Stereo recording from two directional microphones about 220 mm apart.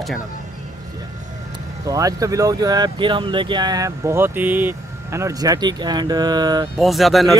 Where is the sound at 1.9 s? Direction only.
15° right (ahead or behind).